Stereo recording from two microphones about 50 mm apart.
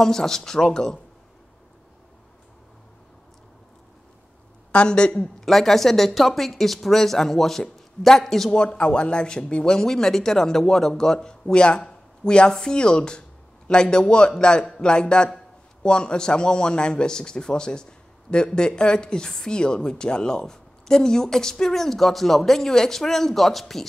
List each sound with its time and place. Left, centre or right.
0.0 s a woman's voice: centre
4.7 s a man's voice: centre
5.4 s speech: centre
8.5 s a man's voice: left; by 23.9 s centre